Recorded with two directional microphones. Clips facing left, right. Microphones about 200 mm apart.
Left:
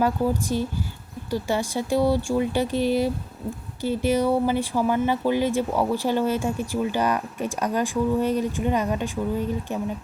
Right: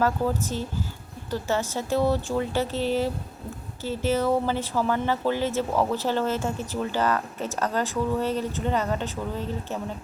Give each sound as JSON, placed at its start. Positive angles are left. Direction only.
{"t": 0.0, "sound": "speech", "side_deg": 15}